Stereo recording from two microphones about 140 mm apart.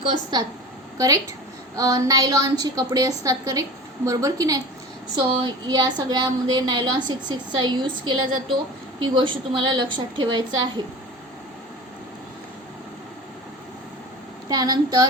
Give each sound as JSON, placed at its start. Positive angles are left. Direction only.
{"t": 0.0, "sound": "a woman's voice", "side_deg": -35}
{"t": 14.4, "sound": "a woman's voice", "side_deg": -30}